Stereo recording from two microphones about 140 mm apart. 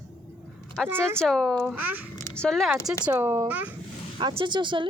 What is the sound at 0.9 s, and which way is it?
Speech, 15° right (ahead or behind).